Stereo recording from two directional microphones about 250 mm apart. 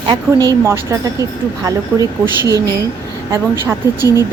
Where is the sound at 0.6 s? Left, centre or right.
Centre.